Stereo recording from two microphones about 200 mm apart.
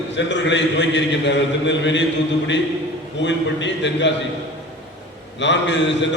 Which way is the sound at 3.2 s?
65° left (ahead or behind).